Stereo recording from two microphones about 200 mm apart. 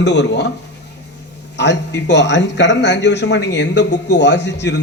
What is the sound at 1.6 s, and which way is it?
A man's voice, 60° left (ahead or behind).